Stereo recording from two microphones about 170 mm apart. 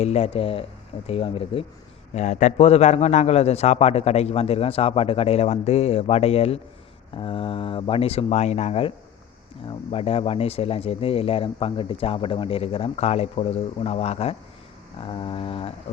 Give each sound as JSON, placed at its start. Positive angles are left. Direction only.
{"t": 0.0, "sound": "a man's voice", "side_deg": 40}